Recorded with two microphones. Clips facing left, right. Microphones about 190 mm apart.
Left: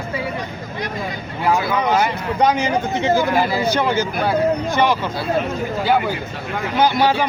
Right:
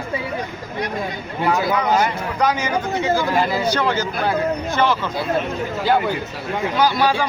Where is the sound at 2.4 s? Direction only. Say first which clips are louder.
Left 3 dB; 25° left (ahead or behind).